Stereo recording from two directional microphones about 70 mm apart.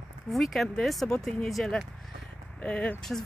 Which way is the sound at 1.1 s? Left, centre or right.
Centre.